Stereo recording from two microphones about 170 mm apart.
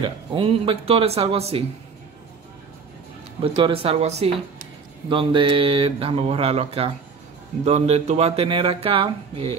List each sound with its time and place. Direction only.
0.0 s speech: 30° right (ahead or behind)
3.5 s speech: 30° right (ahead or behind)